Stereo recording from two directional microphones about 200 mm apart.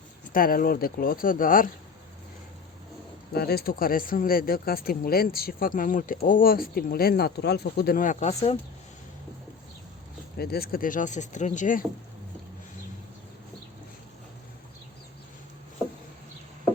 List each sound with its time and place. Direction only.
0.3 s speech: 45° left (ahead or behind)
3.3 s speech: 50° left (ahead or behind); by 8.5 s 30° left (ahead or behind)
10.3 s speech: 50° left (ahead or behind)